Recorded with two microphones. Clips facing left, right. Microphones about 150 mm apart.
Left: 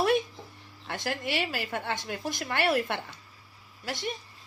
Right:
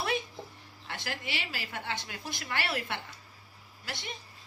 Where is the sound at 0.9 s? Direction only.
45° left (ahead or behind).